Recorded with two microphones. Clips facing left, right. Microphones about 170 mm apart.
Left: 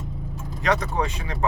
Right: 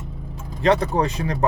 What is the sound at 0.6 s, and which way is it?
Speech, 30° right (ahead or behind).